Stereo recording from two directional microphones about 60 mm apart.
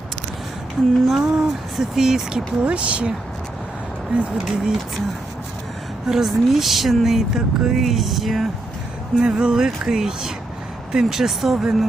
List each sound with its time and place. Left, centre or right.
1.0 s speech: centre
6.1 s speech: centre
9.2 s speech: centre